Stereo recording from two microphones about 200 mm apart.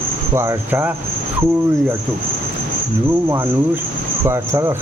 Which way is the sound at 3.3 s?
10° right (ahead or behind).